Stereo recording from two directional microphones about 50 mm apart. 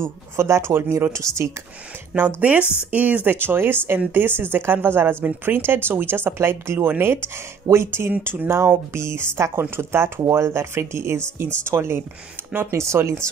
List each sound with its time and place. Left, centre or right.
0.0 s speech: right
1.1 s speech: right
2.1 s speech: right
2.6 s speech: left
2.9 s speech: right
3.3 s speech: right
7.6 s speech: right